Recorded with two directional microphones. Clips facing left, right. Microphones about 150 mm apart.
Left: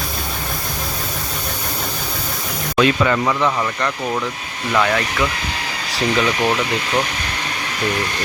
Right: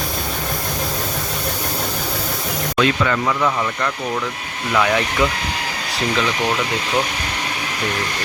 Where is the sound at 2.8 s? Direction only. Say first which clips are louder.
Left 3 dB; 20° left (ahead or behind).